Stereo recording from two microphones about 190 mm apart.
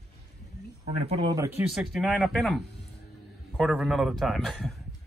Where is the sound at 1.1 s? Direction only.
20° right (ahead or behind).